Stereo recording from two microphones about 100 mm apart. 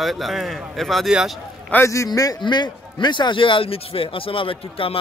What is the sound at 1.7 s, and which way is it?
Speech, 15° left (ahead or behind).